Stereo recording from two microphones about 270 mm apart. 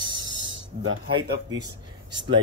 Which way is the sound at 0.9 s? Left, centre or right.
Right.